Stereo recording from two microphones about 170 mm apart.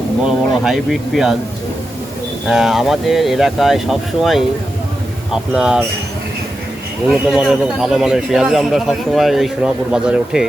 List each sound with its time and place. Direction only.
0.3 s a man's voice: centre (ahead or behind)
2.5 s a man's voice: centre (ahead or behind)
7.1 s a man's voice: centre (ahead or behind)